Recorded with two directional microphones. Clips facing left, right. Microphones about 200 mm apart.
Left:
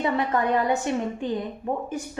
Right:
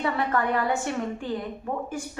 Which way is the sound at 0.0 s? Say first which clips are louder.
Left 2 dB; 20° left (ahead or behind).